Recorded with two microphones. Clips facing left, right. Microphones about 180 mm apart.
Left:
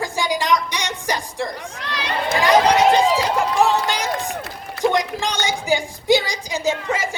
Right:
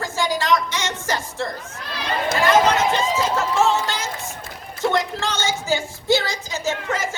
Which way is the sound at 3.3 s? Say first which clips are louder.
Left 2 dB; 15° left (ahead or behind).